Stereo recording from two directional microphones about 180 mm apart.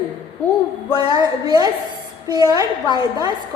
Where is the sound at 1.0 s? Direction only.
20° right (ahead or behind).